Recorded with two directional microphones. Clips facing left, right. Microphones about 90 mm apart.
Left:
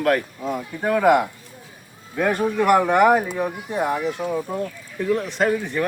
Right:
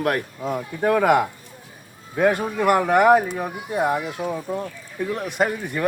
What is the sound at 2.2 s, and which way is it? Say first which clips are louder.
Speech: right 2 dB; 15° right (ahead or behind).